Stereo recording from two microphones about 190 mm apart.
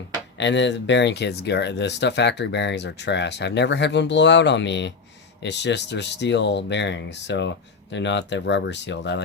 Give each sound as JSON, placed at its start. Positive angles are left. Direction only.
{"t": 0.3, "sound": "speech", "side_deg": 70}